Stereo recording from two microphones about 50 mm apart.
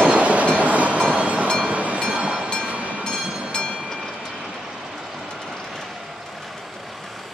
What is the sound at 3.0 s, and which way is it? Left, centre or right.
Train, centre.